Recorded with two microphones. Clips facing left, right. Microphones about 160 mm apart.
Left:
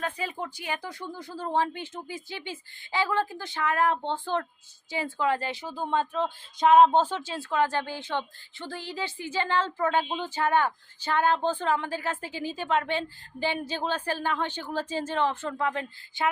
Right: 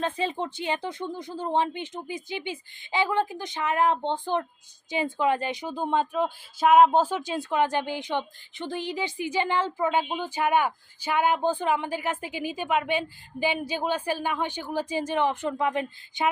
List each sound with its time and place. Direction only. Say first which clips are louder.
0.0 s speech: right 4 dB; 25° right (ahead or behind)